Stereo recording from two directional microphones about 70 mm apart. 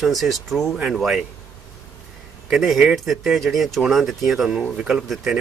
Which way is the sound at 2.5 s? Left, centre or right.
Centre.